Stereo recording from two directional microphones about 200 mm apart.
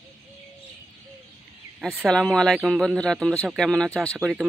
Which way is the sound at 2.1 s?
5° left (ahead or behind).